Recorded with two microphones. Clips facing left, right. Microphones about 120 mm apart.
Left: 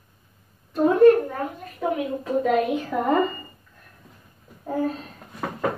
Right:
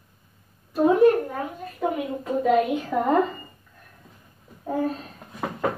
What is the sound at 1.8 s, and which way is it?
A woman's voice, centre (ahead or behind).